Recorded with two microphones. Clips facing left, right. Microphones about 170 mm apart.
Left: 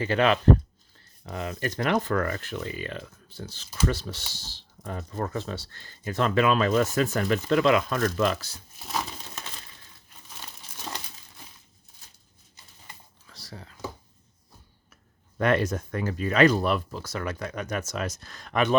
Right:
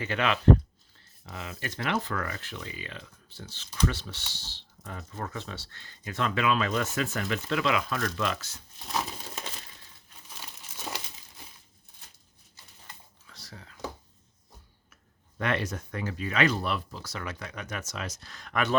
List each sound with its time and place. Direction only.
0.0 s speech: 35° left (ahead or behind)
13.3 s whispering: 35° left (ahead or behind)
15.4 s speech: 45° left (ahead or behind)
18.5 s speech: 20° left (ahead or behind)